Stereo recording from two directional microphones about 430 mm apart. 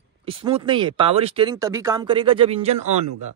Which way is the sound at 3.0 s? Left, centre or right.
Right.